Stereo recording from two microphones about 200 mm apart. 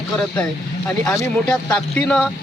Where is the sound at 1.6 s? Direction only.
5° left (ahead or behind).